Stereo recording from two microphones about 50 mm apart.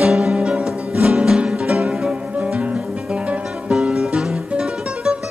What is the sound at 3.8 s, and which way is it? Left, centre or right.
Music, centre.